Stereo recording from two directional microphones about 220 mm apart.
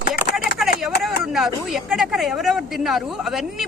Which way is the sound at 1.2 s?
Centre (ahead or behind).